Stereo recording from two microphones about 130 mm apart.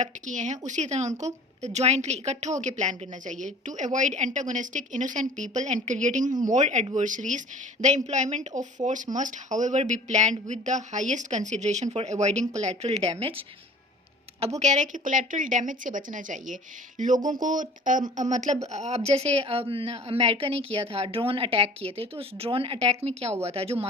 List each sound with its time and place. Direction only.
0.0 s a woman's voice: 70° right (ahead or behind); by 13.4 s 45° right (ahead or behind)
14.6 s a woman's voice: 65° right (ahead or behind)
18.2 s a woman's voice: 65° right (ahead or behind); by 23.9 s 50° right (ahead or behind)